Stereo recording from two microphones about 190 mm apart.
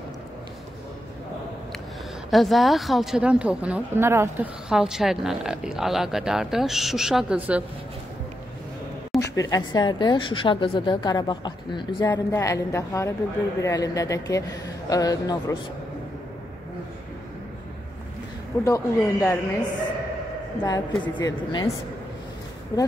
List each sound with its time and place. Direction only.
2.3 s a woman's voice: centre (ahead or behind)
9.1 s a sound: centre (ahead or behind)
9.5 s a woman's voice: 25° left (ahead or behind)
18.6 s speech: 15° left (ahead or behind)
20.6 s a woman's voice: 20° left (ahead or behind)
22.7 s a woman's voice: 20° left (ahead or behind)